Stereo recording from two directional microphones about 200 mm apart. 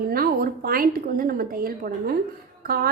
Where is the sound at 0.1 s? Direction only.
50° right (ahead or behind).